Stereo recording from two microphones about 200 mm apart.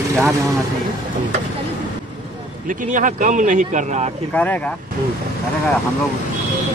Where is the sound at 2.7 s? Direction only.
40° right (ahead or behind).